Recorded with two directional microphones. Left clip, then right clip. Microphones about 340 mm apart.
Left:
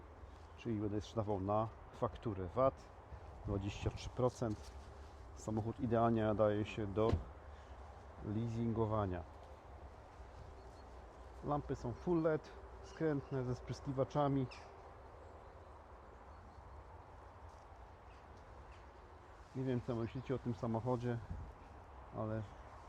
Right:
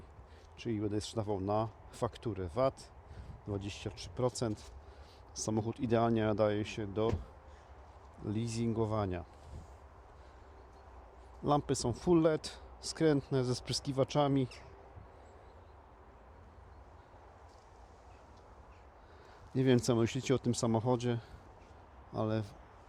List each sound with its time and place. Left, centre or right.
0.6 s speech: centre
8.5 s speech: centre
11.4 s speech: right
19.6 s speech: right